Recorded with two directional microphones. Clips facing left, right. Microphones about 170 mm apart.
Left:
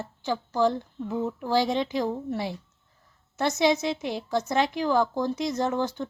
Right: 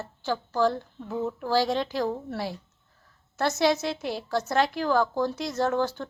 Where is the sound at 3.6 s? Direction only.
5° right (ahead or behind).